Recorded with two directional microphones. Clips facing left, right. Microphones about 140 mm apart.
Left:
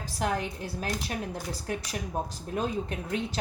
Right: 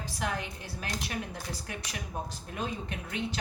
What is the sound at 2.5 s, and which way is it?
Speech, 40° left (ahead or behind).